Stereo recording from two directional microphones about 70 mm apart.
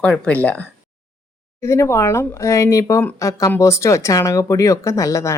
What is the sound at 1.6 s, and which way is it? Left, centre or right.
Speech, left.